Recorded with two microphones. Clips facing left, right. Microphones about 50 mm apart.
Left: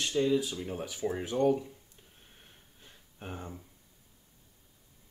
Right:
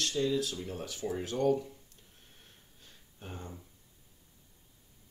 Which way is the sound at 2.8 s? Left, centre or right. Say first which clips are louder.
Left 4 dB; left.